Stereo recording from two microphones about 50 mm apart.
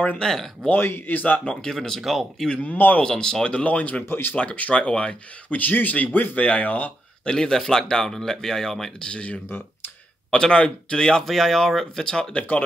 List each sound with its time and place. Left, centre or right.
0.2 s speech: centre
0.7 s speech: left
1.4 s speech: centre
2.6 s speech: left
3.0 s speech: centre
4.0 s speech: left
4.4 s speech: left
5.6 s speech: left
7.2 s speech: centre
9.0 s speech: left
11.2 s speech: centre
12.4 s speech: left